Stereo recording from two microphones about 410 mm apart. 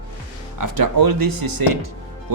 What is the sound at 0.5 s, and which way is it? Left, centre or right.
Speech, right.